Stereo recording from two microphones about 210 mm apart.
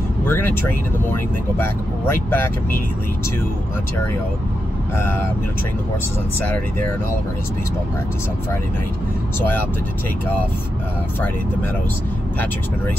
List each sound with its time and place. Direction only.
0.2 s speech: 10° left (ahead or behind)
4.9 s speech: 10° left (ahead or behind)